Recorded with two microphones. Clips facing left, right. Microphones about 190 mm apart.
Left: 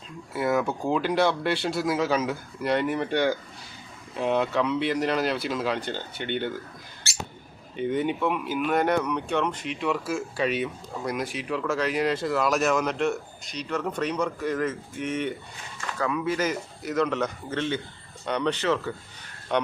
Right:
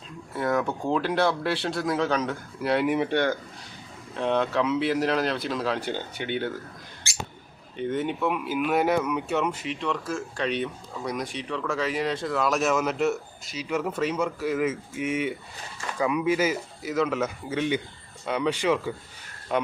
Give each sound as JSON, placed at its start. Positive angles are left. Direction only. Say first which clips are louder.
{"t": 0.3, "sound": "speech", "louder": "left 1 dB", "side_deg": 5}
{"t": 3.1, "sound": "speech", "louder": "even", "side_deg": 5}
{"t": 5.8, "sound": "a man's voice", "louder": "right 2 dB", "side_deg": -10}
{"t": 7.8, "sound": "speech", "louder": "left 1 dB", "side_deg": 0}
{"t": 9.8, "sound": "a man's voice", "louder": "left 3 dB", "side_deg": 5}